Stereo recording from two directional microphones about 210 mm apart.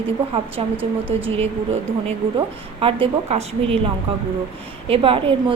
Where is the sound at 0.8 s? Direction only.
10° right (ahead or behind).